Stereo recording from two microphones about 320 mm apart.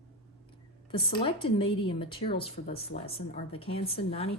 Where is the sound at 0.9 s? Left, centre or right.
Centre.